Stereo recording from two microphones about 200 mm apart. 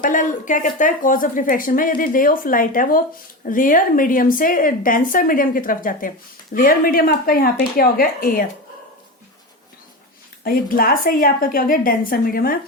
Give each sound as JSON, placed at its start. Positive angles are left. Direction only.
{"t": 0.0, "sound": "a woman's voice", "side_deg": 40}
{"t": 10.4, "sound": "a woman's voice", "side_deg": 45}